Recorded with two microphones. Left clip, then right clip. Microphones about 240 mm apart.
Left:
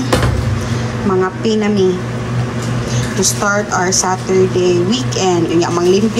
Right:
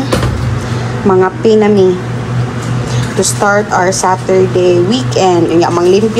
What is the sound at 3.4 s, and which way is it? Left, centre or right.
A woman's voice, centre.